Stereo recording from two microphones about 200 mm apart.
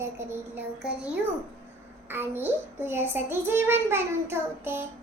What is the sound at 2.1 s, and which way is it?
A child's voice, 10° right (ahead or behind).